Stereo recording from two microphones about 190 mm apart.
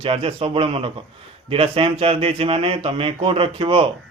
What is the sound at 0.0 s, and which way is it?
Speech, 30° right (ahead or behind).